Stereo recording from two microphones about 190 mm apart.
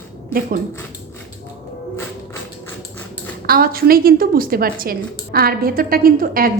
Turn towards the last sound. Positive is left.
turn(degrees=-50)  # may be behind; listen again after turning